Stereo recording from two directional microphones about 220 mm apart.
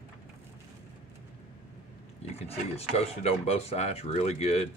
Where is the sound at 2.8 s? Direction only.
25° left (ahead or behind).